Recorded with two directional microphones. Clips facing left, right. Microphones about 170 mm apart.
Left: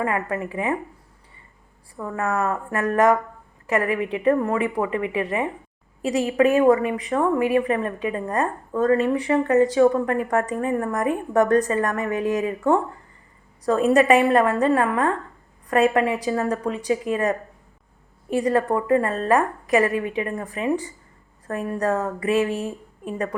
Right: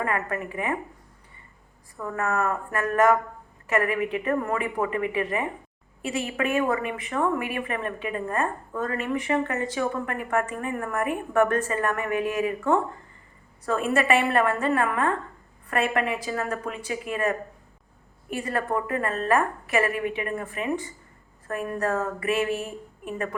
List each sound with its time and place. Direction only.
0.0 s speech: 25° left (ahead or behind)
2.0 s speech: 25° left (ahead or behind)